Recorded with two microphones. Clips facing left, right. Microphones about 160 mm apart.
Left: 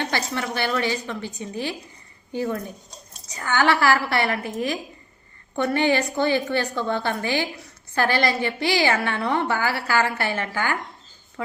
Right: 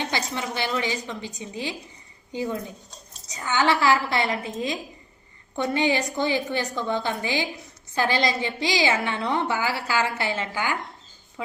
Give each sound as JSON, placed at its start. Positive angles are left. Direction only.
{"t": 0.0, "sound": "a woman's voice", "side_deg": -15}
{"t": 5.5, "sound": "a woman's voice", "side_deg": -15}